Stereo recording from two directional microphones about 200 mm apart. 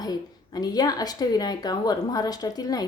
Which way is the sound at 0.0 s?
20° left (ahead or behind).